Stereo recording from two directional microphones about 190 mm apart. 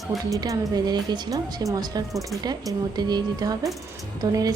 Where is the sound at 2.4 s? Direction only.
20° right (ahead or behind).